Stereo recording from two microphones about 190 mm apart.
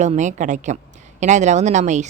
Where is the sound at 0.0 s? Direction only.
40° right (ahead or behind).